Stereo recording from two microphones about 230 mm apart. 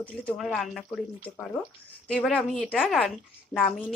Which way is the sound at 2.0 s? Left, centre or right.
Centre.